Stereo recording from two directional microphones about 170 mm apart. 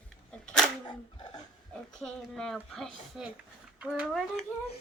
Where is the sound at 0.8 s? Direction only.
25° left (ahead or behind).